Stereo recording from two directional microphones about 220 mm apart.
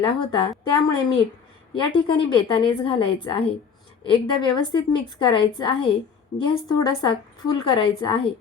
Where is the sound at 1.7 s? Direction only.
20° left (ahead or behind).